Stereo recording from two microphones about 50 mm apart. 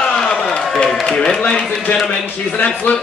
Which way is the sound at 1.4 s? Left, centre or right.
Left.